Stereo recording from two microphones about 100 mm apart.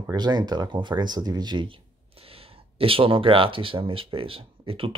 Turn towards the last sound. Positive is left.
turn(degrees=-65)  # may be behind; listen again after turning